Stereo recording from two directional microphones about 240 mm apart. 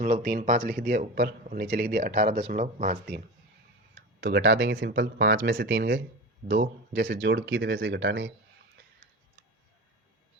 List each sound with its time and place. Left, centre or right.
0.0 s a man's voice: right
4.2 s speech: right